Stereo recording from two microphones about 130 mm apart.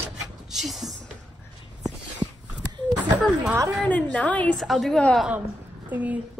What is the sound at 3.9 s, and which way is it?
Speech, 10° left (ahead or behind).